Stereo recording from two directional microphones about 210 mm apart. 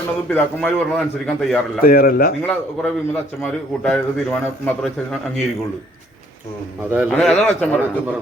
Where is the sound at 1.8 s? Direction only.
45° left (ahead or behind).